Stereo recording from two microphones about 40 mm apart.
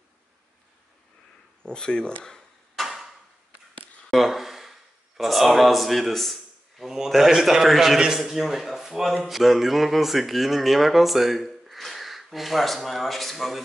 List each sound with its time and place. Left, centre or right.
1.6 s speech: left
2.7 s a sound: centre
4.1 s a man's voice: centre
7.2 s a man's voice: centre